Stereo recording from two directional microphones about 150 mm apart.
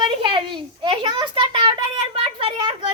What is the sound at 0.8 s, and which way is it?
Speech, 35° right (ahead or behind).